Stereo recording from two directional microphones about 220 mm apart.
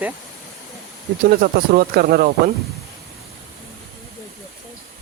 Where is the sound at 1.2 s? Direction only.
45° right (ahead or behind).